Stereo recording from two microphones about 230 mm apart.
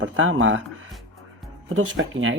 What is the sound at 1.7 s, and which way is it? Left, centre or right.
Speech, right.